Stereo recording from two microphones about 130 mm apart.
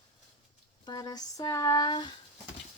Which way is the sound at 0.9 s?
30° left (ahead or behind).